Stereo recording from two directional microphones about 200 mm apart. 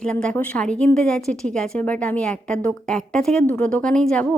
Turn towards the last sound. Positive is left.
turn(degrees=5)  # may be behind; listen again after turning